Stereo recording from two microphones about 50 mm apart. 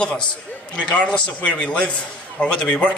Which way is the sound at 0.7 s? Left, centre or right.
Left.